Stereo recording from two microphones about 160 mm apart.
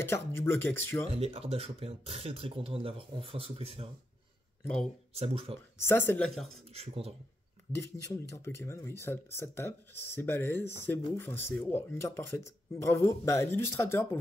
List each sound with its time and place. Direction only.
0.0 s speech: 15° left (ahead or behind)
1.1 s speech: 40° right (ahead or behind)
5.1 s speech: 40° right (ahead or behind)
5.8 s speech: 15° left (ahead or behind)
6.2 s speech: centre (ahead or behind)
6.7 s speech: 40° right (ahead or behind)
7.7 s speech: 20° left (ahead or behind)